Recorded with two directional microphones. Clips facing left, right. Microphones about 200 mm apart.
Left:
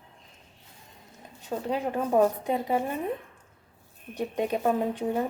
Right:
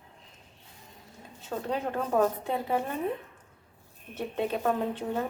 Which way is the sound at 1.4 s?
15° left (ahead or behind).